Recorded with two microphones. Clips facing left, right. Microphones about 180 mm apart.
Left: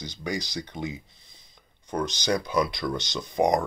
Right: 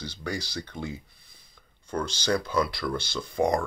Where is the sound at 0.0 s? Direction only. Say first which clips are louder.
Left 2 dB; 15° left (ahead or behind).